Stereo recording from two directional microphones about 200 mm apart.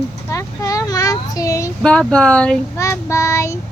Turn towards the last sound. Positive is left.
turn(degrees=15)  # may be behind; listen again after turning